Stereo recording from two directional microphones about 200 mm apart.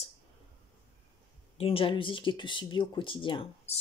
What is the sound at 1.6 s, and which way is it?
Speech, 30° left (ahead or behind).